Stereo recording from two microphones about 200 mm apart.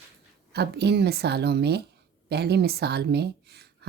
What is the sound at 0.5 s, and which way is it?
Speech, 55° right (ahead or behind).